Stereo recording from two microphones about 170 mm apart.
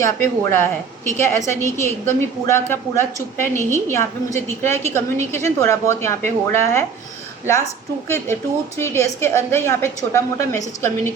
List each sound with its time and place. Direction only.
0.0 s a woman's voice: 15° left (ahead or behind)
8.0 s a woman's voice: 15° left (ahead or behind)